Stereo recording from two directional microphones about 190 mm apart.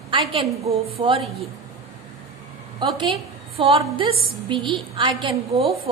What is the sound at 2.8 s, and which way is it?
A woman's voice, 25° right (ahead or behind).